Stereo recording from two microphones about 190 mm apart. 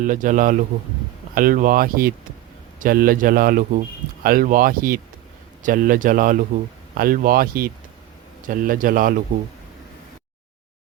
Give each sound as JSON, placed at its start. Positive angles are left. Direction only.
{"t": 0.0, "sound": "speech", "side_deg": -45}